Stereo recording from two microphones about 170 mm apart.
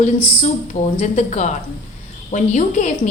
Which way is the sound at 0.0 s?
45° left (ahead or behind).